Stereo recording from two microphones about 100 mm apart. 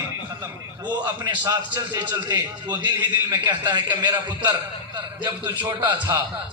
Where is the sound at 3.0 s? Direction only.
20° right (ahead or behind).